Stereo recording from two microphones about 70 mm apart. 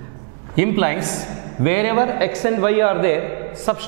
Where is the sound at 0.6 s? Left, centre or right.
Centre.